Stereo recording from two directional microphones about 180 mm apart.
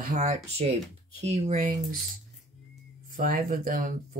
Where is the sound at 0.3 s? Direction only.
35° right (ahead or behind).